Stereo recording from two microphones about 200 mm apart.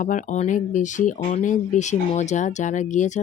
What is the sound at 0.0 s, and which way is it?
Speech, 40° left (ahead or behind).